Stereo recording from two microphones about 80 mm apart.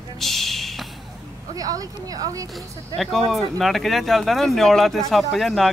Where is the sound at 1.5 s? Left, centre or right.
Right.